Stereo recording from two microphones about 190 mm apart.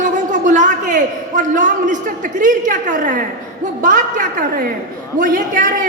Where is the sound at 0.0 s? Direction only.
40° right (ahead or behind).